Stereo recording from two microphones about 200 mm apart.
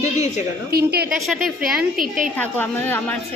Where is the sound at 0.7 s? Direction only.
50° right (ahead or behind).